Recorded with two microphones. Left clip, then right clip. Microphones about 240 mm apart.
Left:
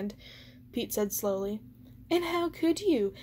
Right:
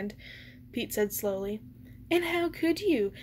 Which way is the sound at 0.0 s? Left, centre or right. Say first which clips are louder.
Right 1 dB; left.